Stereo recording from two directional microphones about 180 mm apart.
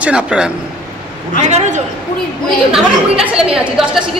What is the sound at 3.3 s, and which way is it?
Speech, 5° right (ahead or behind).